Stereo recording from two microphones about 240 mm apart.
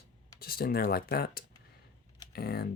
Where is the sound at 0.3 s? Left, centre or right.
Left.